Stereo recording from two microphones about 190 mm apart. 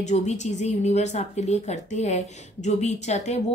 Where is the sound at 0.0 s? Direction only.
35° left (ahead or behind).